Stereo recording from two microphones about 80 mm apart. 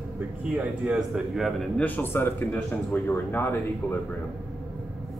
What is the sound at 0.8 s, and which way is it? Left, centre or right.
Speech, centre.